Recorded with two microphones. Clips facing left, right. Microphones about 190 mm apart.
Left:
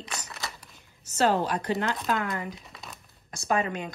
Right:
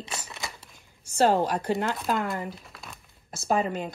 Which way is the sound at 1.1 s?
10° right (ahead or behind).